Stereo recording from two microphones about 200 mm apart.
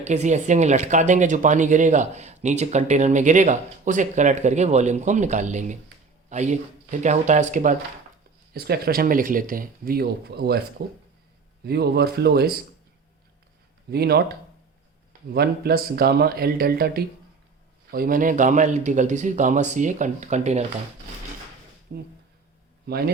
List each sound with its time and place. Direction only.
0.0 s speech: 35° right (ahead or behind)
8.5 s speech: 50° right (ahead or behind)
13.9 s speech: 55° right (ahead or behind); by 20.7 s 35° right (ahead or behind)
21.9 s speech: 50° right (ahead or behind)